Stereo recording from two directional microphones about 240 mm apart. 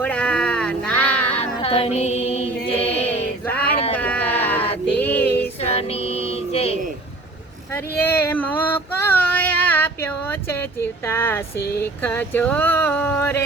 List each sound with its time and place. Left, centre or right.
0.0 s a sound: centre
1.4 s child singing: left
3.4 s a sound: centre
5.5 s female singing: left
7.7 s child singing: centre
11.0 s speech: centre